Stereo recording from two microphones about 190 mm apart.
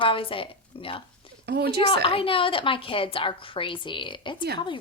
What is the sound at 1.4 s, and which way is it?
Speech, 60° right (ahead or behind).